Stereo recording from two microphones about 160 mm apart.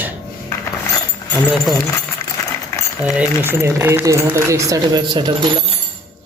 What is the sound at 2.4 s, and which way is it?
Coin, 20° left (ahead or behind).